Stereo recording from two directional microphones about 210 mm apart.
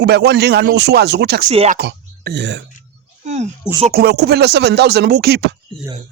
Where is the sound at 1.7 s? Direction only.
50° right (ahead or behind).